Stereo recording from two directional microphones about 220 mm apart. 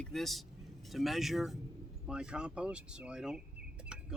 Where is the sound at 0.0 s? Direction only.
Centre (ahead or behind).